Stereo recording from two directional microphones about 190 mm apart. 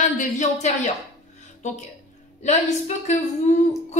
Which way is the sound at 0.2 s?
40° left (ahead or behind).